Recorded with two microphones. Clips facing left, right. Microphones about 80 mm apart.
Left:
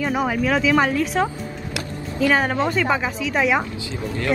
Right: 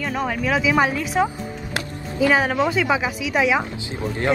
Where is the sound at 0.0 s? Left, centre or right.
Centre.